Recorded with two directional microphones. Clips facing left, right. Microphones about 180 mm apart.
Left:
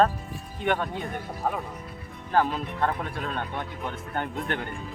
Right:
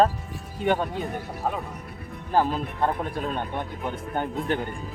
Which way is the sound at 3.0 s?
40° right (ahead or behind).